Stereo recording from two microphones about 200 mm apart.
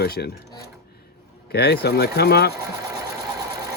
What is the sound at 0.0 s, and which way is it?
Speech, 50° left (ahead or behind).